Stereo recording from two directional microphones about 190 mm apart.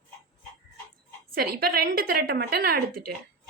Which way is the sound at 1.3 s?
50° right (ahead or behind).